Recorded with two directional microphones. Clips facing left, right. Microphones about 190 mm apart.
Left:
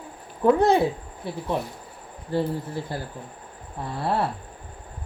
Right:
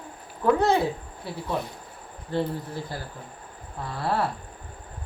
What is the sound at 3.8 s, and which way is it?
Speech, 20° left (ahead or behind).